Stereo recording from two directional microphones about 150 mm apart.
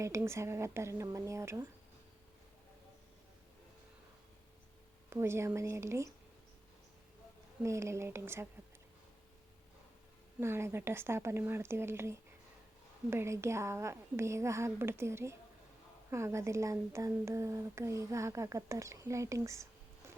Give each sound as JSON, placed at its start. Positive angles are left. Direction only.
{"t": 0.0, "sound": "speech", "side_deg": -20}
{"t": 5.0, "sound": "speech", "side_deg": -15}
{"t": 7.6, "sound": "speech", "side_deg": -20}
{"t": 10.4, "sound": "speech", "side_deg": -15}